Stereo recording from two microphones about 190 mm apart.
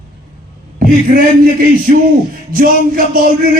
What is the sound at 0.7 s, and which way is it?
Speech, 50° right (ahead or behind).